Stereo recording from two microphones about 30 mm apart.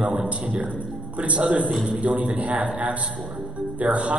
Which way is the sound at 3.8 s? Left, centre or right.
Right.